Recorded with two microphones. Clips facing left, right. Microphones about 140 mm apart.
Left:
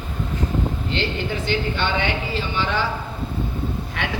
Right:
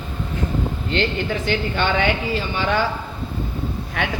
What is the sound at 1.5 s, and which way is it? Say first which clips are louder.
A woman's voice: right 2 dB; 50° right (ahead or behind).